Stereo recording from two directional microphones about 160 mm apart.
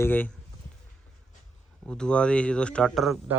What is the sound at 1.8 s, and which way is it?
Speech, 5° left (ahead or behind).